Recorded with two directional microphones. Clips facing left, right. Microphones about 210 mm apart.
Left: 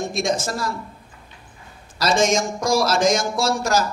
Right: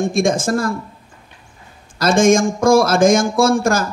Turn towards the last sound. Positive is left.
turn(degrees=-50)  # may be behind; listen again after turning